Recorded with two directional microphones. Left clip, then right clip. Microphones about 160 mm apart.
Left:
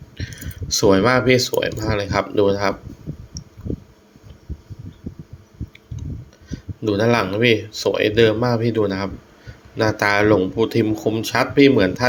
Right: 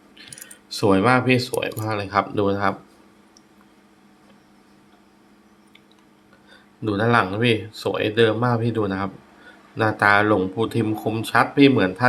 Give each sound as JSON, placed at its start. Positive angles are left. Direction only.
{"t": 0.2, "sound": "speech", "side_deg": 10}
{"t": 6.8, "sound": "speech", "side_deg": 15}